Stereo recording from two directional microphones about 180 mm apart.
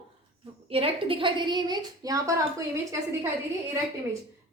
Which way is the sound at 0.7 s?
30° right (ahead or behind).